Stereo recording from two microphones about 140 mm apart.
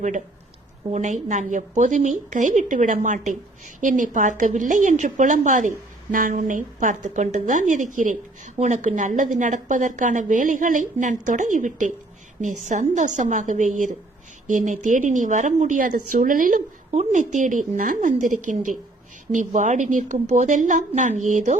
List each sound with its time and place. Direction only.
0.9 s speech: 55° right (ahead or behind); by 16.6 s 75° right (ahead or behind)
16.9 s speech: 55° right (ahead or behind)